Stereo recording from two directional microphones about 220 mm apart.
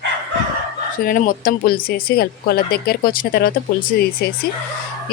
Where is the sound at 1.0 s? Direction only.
40° left (ahead or behind).